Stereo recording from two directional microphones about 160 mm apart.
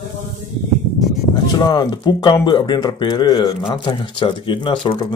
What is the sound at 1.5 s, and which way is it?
Speech, 25° left (ahead or behind).